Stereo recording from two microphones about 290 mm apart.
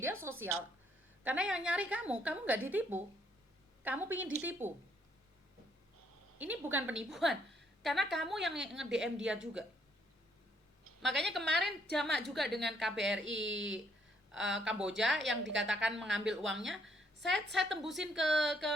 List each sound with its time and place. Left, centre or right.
0.0 s a woman's voice: centre
6.4 s a woman's voice: centre
11.2 s a woman's voice: centre
13.2 s speech: right
14.3 s a woman's voice: centre
15.2 s speech: right
15.6 s a woman's voice: centre
16.9 s a sound: right
17.2 s a woman's voice: centre